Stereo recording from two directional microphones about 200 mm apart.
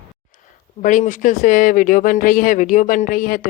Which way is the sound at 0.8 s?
40° left (ahead or behind).